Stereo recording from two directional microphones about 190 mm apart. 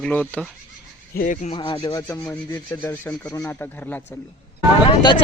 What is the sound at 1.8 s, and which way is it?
Speech, 15° left (ahead or behind).